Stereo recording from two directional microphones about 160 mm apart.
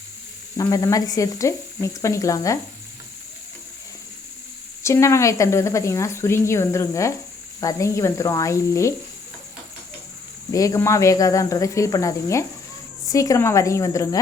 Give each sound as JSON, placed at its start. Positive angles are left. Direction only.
{"t": 0.5, "sound": "speech", "side_deg": 20}
{"t": 4.8, "sound": "speech", "side_deg": 20}
{"t": 10.5, "sound": "speech", "side_deg": 20}